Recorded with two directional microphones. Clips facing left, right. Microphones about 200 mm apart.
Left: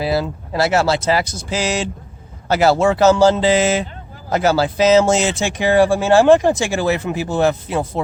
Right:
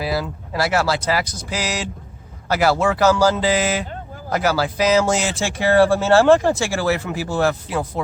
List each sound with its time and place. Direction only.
0.0 s speech: 25° left (ahead or behind)